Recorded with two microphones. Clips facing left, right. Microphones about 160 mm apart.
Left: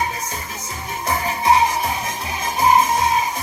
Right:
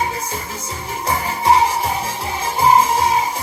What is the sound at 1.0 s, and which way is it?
Music, 30° right (ahead or behind).